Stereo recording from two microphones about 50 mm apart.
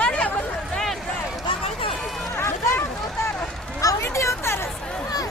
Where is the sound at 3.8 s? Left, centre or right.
Left.